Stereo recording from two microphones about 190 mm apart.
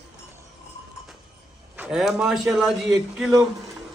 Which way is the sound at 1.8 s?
5° right (ahead or behind).